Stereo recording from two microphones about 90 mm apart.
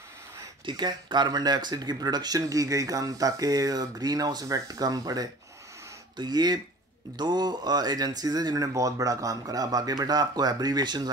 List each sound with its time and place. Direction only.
0.7 s speech: 55° right (ahead or behind)